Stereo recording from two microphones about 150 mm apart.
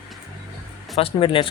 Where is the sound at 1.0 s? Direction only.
35° left (ahead or behind).